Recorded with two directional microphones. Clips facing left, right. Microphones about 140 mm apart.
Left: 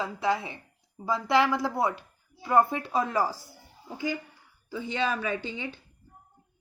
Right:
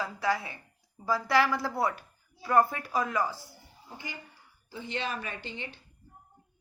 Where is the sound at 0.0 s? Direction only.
20° left (ahead or behind).